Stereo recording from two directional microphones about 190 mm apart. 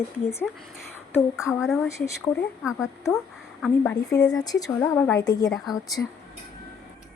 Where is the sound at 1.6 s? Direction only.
Centre (ahead or behind).